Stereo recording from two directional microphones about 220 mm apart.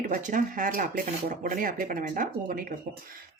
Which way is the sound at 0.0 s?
35° right (ahead or behind).